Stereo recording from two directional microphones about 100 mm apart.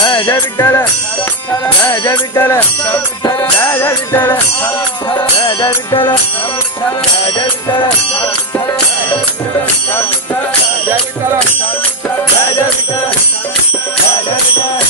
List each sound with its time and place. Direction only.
0.3 s music: 25° left (ahead or behind)
1.9 s music: 25° left (ahead or behind)
5.5 s music: 50° left (ahead or behind)